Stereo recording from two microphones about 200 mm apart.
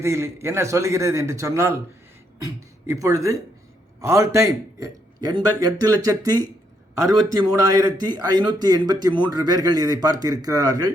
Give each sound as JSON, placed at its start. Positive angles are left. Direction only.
{"t": 0.0, "sound": "a man's voice", "side_deg": -15}